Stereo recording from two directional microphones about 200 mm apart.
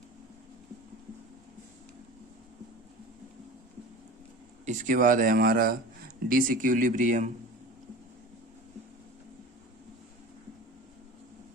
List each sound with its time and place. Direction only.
4.6 s speech: 40° right (ahead or behind)